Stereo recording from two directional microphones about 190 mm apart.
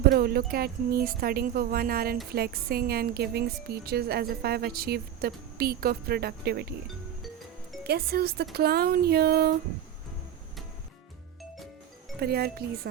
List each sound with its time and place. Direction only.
0.1 s a woman's voice: 55° right (ahead or behind)
7.9 s a woman's voice: 55° right (ahead or behind)
12.2 s a woman's voice: 55° right (ahead or behind)